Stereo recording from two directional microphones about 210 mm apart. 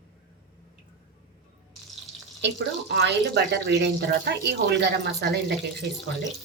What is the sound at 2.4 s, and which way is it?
A woman's voice, 55° right (ahead or behind).